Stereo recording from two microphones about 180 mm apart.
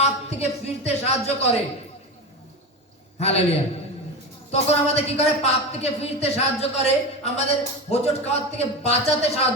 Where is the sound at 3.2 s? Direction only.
35° left (ahead or behind).